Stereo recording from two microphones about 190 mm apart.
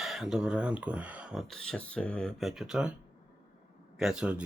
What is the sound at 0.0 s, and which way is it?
Speech, centre (ahead or behind).